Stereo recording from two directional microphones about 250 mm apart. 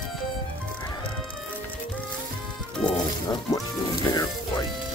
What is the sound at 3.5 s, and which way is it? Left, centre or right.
Music, centre.